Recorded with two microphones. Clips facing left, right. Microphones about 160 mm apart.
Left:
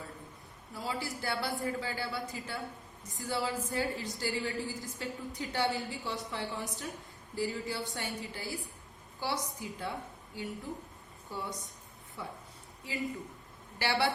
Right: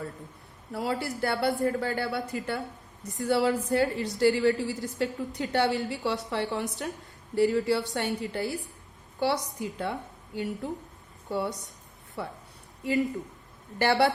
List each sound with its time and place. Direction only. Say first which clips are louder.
0.7 s a woman's voice: right 7 dB; 65° right (ahead or behind)
13.7 s speech: right 8 dB; 50° right (ahead or behind)